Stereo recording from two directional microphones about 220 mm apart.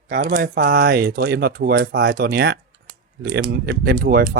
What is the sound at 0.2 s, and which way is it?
Speech, 45° right (ahead or behind).